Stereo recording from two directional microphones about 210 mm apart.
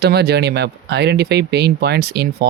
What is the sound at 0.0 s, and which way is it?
Speech, 50° right (ahead or behind).